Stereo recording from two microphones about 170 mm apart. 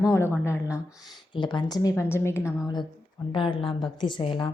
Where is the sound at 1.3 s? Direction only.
25° left (ahead or behind).